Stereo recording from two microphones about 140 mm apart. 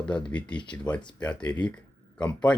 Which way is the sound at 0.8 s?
10° left (ahead or behind).